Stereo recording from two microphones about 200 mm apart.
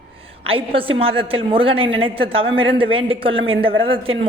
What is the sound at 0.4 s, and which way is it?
A man's voice, 25° right (ahead or behind).